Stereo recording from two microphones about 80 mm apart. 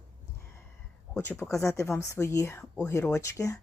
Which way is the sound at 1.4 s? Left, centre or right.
Left.